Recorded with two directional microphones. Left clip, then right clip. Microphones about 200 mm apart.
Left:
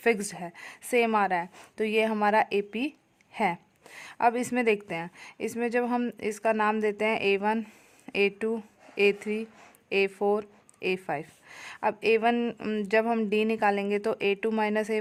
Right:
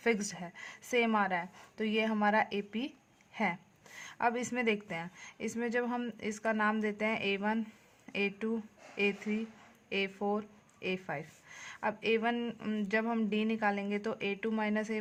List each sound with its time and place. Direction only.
0.0 s speech: 35° left (ahead or behind)